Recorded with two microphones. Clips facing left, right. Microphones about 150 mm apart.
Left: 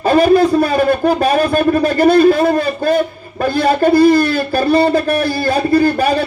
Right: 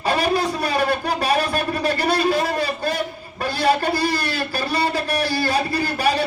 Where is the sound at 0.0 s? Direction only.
50° left (ahead or behind).